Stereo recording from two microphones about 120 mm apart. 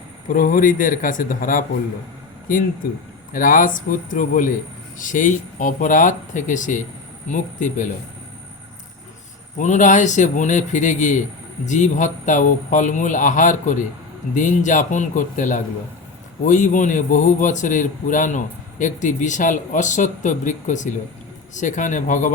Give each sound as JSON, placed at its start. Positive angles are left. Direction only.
{"t": 0.4, "sound": "a man's voice", "side_deg": 90}
{"t": 3.6, "sound": "a man's voice", "side_deg": 90}
{"t": 9.6, "sound": "a man's voice", "side_deg": 90}